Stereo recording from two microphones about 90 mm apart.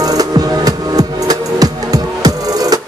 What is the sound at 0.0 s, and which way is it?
Music, 45° right (ahead or behind).